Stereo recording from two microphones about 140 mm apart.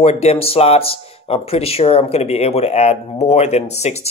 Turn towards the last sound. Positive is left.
turn(degrees=50)  # may be behind; listen again after turning